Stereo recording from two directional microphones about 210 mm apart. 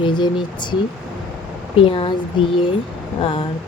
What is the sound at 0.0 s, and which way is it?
Speech, 20° left (ahead or behind).